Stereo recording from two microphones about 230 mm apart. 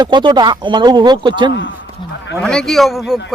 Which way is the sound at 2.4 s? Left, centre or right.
Centre.